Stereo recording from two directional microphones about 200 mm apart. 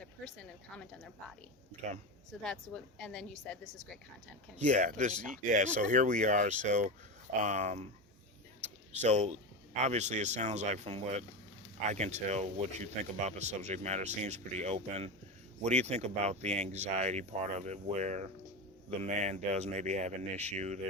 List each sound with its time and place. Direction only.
0.0 s speech: 5° left (ahead or behind)
2.4 s a woman's voice: 5° left (ahead or behind)
4.5 s speech: 35° right (ahead or behind)
8.9 s speech: 35° right (ahead or behind)